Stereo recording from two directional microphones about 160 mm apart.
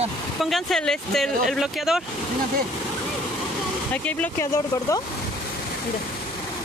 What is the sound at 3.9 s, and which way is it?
Speech, 10° left (ahead or behind).